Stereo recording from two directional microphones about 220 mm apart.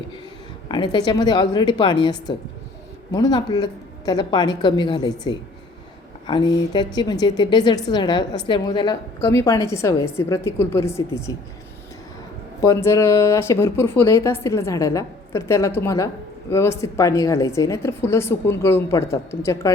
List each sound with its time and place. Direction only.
0.7 s a woman's voice: 20° left (ahead or behind)
12.6 s speech: 15° left (ahead or behind)